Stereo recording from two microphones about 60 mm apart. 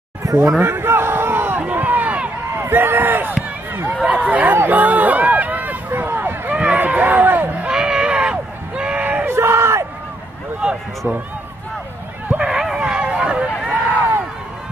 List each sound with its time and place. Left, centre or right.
0.2 s a sound: right
2.6 s a sound: right
4.3 s speech: right
4.6 s run: right
6.5 s run: right
7.6 s a sound: centre
9.2 s yell: right
10.6 s run: centre
11.0 s speech: right
12.4 s dog: centre